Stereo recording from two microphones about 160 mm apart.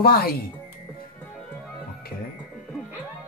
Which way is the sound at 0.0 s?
70° left (ahead or behind).